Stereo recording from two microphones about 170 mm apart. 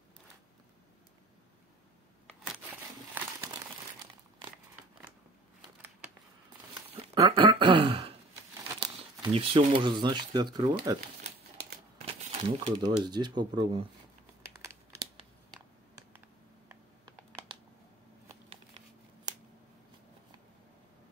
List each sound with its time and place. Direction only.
2.4 s a sound: 5° right (ahead or behind)
3.2 s crumpling: 10° right (ahead or behind)
7.2 s throat clearing: 30° right (ahead or behind)
8.7 s speech: 30° right (ahead or behind)
12.3 s speech: 30° right (ahead or behind)
19.3 s a sound: 25° right (ahead or behind)